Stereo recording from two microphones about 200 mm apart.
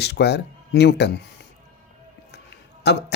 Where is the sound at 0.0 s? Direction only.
55° left (ahead or behind).